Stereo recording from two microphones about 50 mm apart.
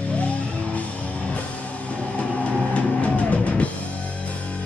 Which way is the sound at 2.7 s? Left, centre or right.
Left.